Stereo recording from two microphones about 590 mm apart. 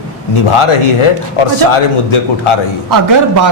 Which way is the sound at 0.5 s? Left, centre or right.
Left.